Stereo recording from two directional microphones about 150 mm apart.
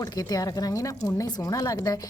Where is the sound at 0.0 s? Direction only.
25° left (ahead or behind).